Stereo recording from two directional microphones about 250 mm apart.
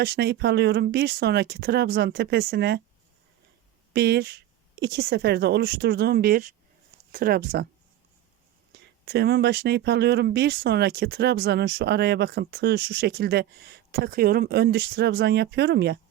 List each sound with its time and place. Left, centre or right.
0.0 s speech: right
3.9 s speech: right
8.7 s speech: right